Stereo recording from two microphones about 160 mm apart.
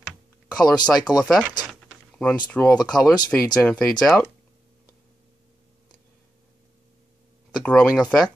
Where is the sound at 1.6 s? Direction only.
5° left (ahead or behind).